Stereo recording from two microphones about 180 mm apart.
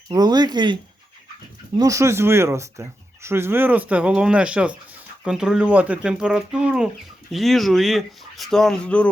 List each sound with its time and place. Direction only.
0.1 s speech: 20° right (ahead or behind); by 9.0 s 5° left (ahead or behind)